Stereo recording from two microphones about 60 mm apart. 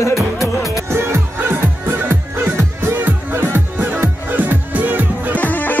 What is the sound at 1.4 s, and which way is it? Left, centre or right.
Music, right.